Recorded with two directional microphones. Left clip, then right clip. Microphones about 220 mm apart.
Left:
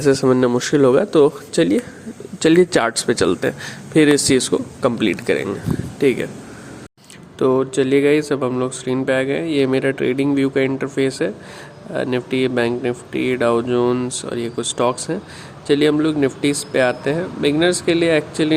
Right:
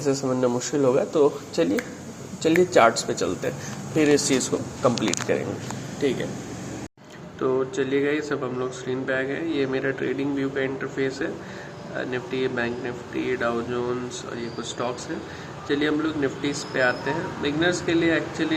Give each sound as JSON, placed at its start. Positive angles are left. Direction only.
{"t": 0.0, "sound": "a man's voice", "side_deg": 55}
{"t": 7.3, "sound": "a man's voice", "side_deg": 45}